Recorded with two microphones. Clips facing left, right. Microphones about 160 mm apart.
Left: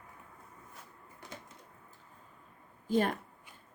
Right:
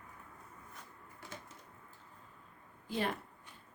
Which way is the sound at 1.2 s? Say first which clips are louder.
Left 1 dB; 20° left (ahead or behind).